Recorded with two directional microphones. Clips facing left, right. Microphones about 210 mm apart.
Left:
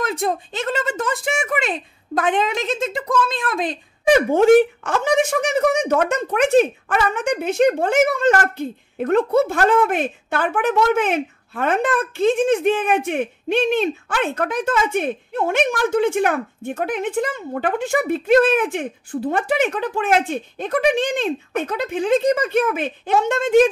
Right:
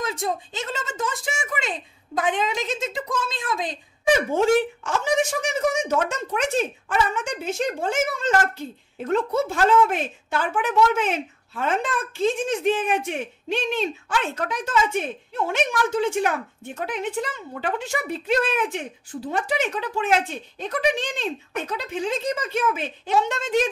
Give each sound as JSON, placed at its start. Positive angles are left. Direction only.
{"t": 0.0, "sound": "speech", "side_deg": 60}